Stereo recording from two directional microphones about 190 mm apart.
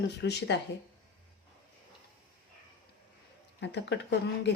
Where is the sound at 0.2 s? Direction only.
65° left (ahead or behind).